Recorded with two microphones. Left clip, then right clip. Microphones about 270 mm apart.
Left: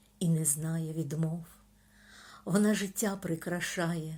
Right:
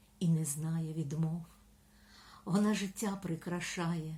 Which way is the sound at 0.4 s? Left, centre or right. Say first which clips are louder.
Left 5 dB; centre.